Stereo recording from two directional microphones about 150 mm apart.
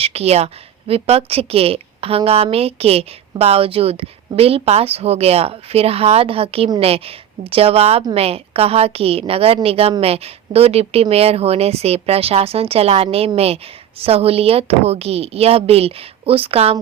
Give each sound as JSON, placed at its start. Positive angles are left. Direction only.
{"t": 0.0, "sound": "a woman's voice", "side_deg": -45}